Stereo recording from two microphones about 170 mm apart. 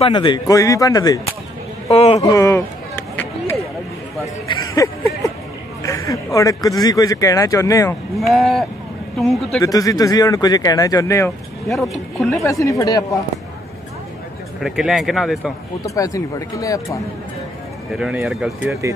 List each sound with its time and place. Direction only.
0.0 s speech: 30° left (ahead or behind)
1.9 s a man's voice: 35° left (ahead or behind)
2.2 s a sound: 20° left (ahead or behind)
5.8 s speech: 20° left (ahead or behind)
8.3 s speech: centre (ahead or behind)
9.6 s speech: 20° left (ahead or behind)
11.6 s speech: centre (ahead or behind)
12.4 s speech: 20° left (ahead or behind)
14.6 s speech: centre (ahead or behind)
15.8 s speech: 20° left (ahead or behind)
17.9 s speech: 5° right (ahead or behind)